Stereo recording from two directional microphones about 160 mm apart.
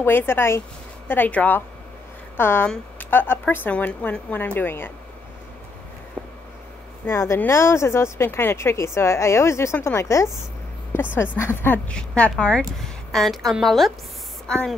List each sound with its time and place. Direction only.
0.0 s speech: 15° left (ahead or behind)
6.2 s a sound: 5° right (ahead or behind)
7.1 s a woman's voice: 15° left (ahead or behind)